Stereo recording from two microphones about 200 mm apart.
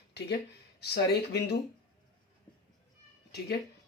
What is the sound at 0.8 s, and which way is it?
Speech, 55° left (ahead or behind).